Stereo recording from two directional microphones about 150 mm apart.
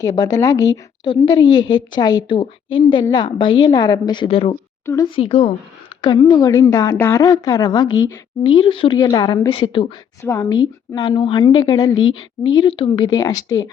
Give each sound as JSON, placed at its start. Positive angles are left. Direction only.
{"t": 0.0, "sound": "a woman's voice", "side_deg": 25}
{"t": 8.4, "sound": "a woman's voice", "side_deg": 35}
{"t": 10.2, "sound": "a woman's voice", "side_deg": 20}
{"t": 10.6, "sound": "a woman's voice", "side_deg": 30}